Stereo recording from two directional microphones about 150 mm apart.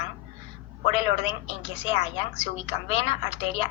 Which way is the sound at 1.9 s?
40° left (ahead or behind).